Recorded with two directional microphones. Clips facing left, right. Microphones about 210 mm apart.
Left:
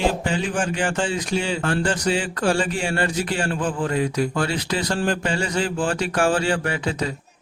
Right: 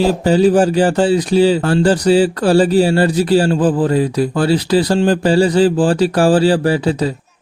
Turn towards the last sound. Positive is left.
turn(degrees=-35)  # may be behind; listen again after turning